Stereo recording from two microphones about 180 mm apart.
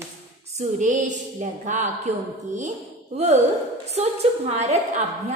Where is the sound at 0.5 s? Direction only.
45° right (ahead or behind).